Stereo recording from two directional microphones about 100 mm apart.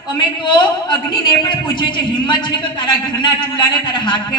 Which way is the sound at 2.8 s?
55° left (ahead or behind).